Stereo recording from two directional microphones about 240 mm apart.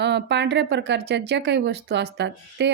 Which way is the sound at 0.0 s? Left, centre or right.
Right.